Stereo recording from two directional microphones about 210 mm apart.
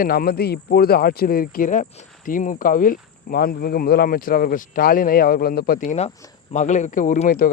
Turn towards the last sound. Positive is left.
turn(degrees=40)  # may be behind; listen again after turning